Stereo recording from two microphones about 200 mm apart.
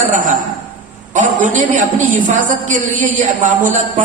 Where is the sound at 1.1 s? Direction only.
40° right (ahead or behind).